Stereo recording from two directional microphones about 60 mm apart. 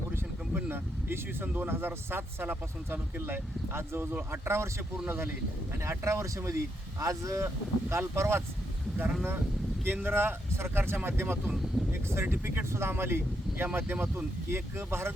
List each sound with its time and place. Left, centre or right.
0.5 s speech: right
5.8 s speech: right
9.8 s speech: right
11.8 s a sound: centre
12.1 s speech: right
13.7 s speech: right
14.5 s speech: right